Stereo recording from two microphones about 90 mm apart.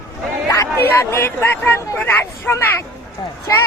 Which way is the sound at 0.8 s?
25° left (ahead or behind).